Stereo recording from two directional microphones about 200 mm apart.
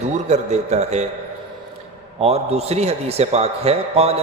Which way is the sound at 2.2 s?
30° right (ahead or behind).